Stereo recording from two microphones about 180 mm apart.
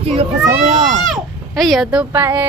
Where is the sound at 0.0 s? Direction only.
30° right (ahead or behind).